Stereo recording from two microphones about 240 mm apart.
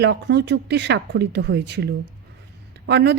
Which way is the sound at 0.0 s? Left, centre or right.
Right.